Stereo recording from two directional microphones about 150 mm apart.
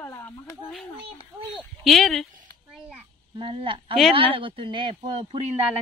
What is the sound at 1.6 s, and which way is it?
Speech, centre (ahead or behind).